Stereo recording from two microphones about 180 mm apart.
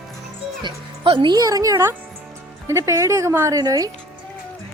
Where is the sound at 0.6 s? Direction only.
25° right (ahead or behind).